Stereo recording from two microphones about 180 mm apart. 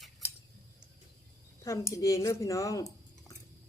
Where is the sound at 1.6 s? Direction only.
15° left (ahead or behind).